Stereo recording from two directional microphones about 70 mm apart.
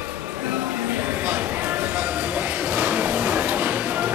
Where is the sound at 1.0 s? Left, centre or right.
Right.